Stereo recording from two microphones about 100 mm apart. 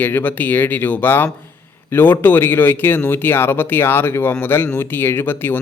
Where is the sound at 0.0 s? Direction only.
20° left (ahead or behind).